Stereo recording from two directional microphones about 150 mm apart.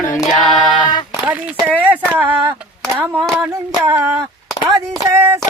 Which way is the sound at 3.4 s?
15° right (ahead or behind).